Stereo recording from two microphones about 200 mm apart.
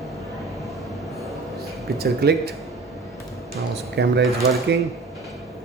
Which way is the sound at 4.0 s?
60° right (ahead or behind).